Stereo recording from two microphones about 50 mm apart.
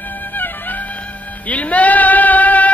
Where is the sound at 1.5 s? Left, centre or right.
Left.